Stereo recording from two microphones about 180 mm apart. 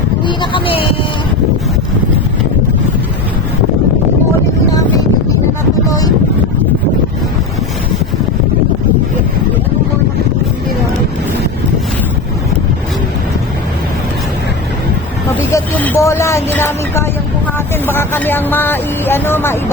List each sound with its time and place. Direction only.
0.3 s speech: 30° left (ahead or behind)
15.5 s a sound: 10° left (ahead or behind)
17.8 s speech: 10° left (ahead or behind)